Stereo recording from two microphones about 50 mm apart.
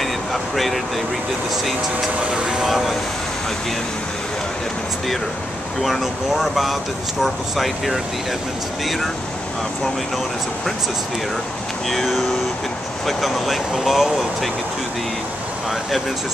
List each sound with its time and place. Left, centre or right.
0.0 s vehicle: centre
2.3 s speech: centre
2.6 s speech: centre
5.8 s speech: centre
11.9 s speech: centre